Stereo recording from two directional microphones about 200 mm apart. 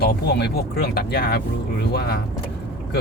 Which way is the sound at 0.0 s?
55° left (ahead or behind).